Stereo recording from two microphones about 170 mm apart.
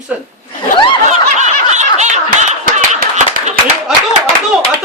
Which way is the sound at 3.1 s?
45° right (ahead or behind).